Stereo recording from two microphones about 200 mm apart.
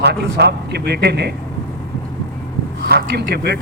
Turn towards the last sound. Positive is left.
turn(degrees=-55)  # may be behind; listen again after turning